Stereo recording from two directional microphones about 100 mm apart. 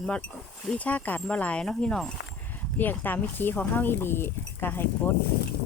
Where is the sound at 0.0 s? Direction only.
10° left (ahead or behind).